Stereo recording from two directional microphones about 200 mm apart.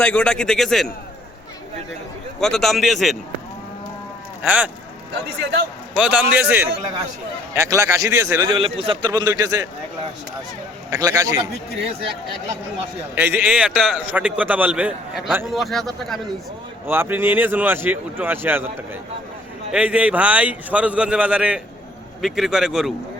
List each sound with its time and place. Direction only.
0.0 s a man's voice: 5° left (ahead or behind)
2.4 s a man's voice: centre (ahead or behind)
4.4 s a man's voice: 5° right (ahead or behind)
6.0 s a man's voice: 5° right (ahead or behind)
10.9 s a man's voice: 15° right (ahead or behind)
13.1 s a man's voice: 10° right (ahead or behind)
16.8 s a man's voice: 10° right (ahead or behind)
19.7 s a man's voice: 5° right (ahead or behind)